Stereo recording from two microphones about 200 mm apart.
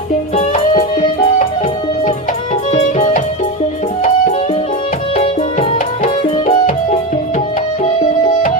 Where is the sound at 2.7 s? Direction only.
35° left (ahead or behind).